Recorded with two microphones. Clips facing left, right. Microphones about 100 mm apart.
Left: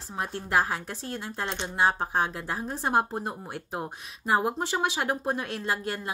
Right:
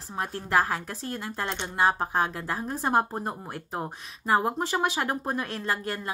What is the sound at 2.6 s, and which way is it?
Speech, 50° right (ahead or behind).